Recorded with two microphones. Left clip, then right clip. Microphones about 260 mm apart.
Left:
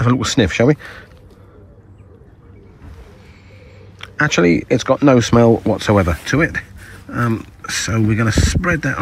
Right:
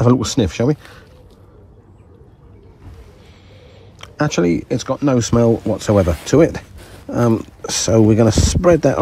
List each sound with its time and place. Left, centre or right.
0.0 s speech: centre
4.2 s speech: centre